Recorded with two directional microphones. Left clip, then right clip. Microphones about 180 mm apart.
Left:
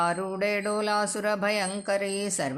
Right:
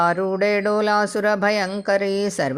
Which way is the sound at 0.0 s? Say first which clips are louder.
Right 8 dB; 35° right (ahead or behind).